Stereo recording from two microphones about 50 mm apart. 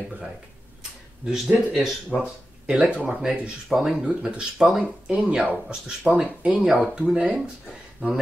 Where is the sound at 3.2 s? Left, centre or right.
Centre; by 5.5 s right.